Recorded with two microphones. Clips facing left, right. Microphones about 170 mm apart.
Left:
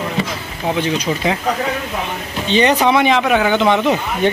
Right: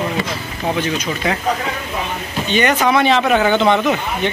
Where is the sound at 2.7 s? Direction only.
15° left (ahead or behind).